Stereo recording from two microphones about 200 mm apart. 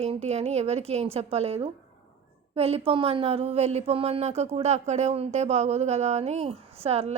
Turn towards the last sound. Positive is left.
turn(degrees=-30)  # may be behind; listen again after turning